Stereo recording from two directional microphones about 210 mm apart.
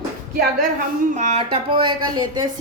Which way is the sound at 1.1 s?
35° right (ahead or behind).